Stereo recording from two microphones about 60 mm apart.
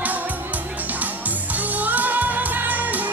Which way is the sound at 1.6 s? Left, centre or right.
Right.